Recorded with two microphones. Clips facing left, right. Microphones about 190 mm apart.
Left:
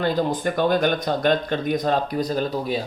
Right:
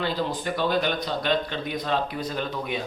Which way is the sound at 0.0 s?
45° left (ahead or behind).